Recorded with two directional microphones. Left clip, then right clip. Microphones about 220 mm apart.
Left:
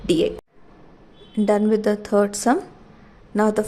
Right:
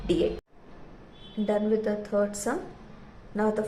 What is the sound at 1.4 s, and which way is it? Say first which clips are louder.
A woman's voice: left 7 dB; 55° left (ahead or behind).